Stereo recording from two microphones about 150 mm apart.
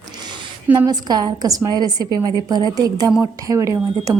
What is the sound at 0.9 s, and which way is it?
A woman's voice, 25° right (ahead or behind).